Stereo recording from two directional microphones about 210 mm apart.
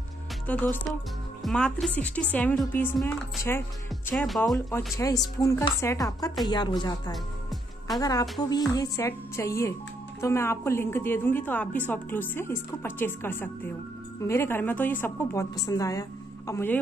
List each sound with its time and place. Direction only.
0.5 s a woman's voice: 5° left (ahead or behind)
4.6 s a woman's voice: 15° left (ahead or behind)